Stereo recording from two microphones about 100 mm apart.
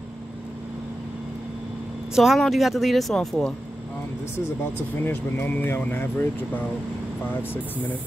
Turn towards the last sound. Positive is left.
turn(degrees=20)  # may be behind; listen again after turning